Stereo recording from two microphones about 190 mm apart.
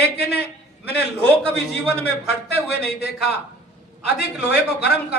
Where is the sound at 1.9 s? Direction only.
60° left (ahead or behind).